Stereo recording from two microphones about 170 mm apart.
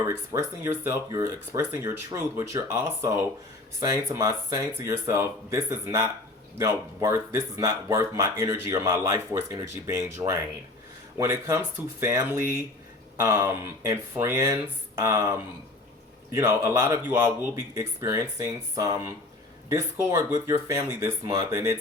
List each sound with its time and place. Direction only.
0.0 s speech: 15° right (ahead or behind)